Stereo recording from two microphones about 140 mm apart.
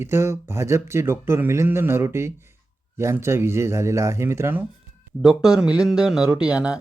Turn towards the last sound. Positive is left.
turn(degrees=-5)  # may be behind; listen again after turning